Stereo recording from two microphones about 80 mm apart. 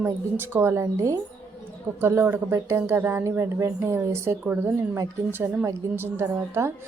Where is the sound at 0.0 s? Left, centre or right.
Right.